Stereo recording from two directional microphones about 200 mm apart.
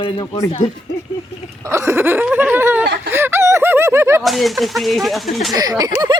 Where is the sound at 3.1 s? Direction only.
10° right (ahead or behind).